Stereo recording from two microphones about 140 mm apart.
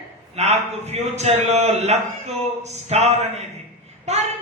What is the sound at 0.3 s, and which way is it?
Speech, 50° right (ahead or behind).